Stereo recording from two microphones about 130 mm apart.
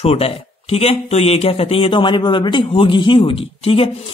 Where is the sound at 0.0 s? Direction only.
50° left (ahead or behind).